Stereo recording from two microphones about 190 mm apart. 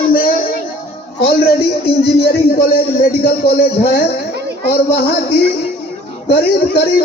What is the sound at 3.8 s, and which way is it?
Speech, 55° left (ahead or behind).